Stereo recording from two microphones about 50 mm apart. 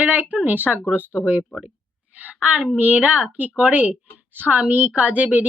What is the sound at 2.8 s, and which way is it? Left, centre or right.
A woman's voice, right.